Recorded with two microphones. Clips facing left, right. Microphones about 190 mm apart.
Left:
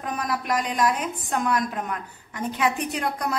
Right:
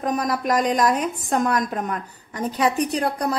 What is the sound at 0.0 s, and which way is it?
A woman's voice, 40° right (ahead or behind).